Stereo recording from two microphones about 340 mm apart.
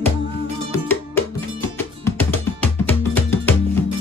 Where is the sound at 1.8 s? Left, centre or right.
Centre.